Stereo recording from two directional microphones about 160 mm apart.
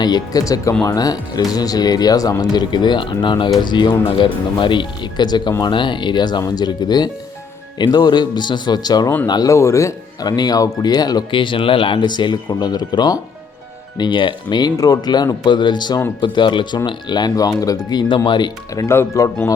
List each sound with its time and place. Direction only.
0.0 s speech: 25° left (ahead or behind)